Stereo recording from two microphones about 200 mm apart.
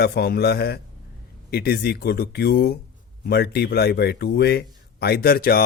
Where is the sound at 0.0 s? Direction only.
55° left (ahead or behind).